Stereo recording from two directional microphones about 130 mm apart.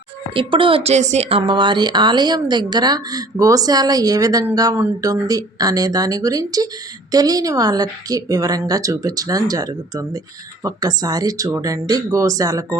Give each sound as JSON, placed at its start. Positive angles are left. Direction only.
{"t": 0.3, "sound": "a woman's voice", "side_deg": -40}